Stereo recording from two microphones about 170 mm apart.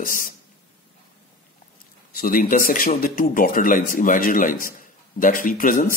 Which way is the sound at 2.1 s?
55° left (ahead or behind).